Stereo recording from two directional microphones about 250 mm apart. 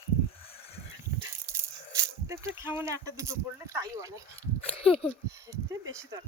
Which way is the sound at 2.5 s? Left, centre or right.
Centre.